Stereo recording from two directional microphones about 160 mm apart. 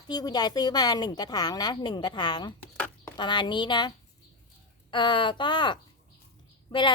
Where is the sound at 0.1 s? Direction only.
25° left (ahead or behind).